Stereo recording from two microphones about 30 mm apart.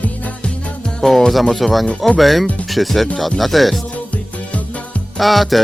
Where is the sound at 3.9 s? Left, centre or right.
Left.